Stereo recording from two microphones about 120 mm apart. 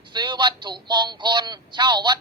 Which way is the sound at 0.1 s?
40° right (ahead or behind).